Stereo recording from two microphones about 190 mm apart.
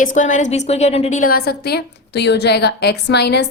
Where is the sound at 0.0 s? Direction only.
40° left (ahead or behind).